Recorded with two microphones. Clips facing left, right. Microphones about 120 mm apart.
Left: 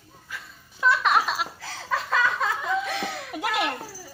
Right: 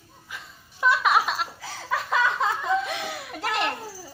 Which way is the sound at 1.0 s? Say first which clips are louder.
Even; centre (ahead or behind).